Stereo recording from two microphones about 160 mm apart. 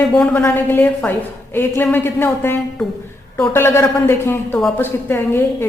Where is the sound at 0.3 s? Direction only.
15° left (ahead or behind).